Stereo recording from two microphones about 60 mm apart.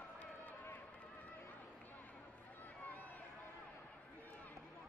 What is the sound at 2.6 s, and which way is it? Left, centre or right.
Run, left.